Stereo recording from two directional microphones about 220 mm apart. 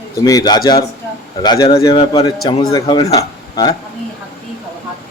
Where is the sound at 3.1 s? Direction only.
15° left (ahead or behind).